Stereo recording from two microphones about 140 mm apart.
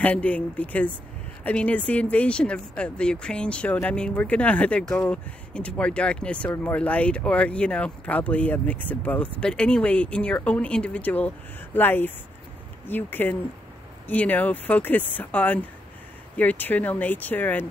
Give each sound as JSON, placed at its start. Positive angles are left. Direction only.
{"t": 0.0, "sound": "speech", "side_deg": 10}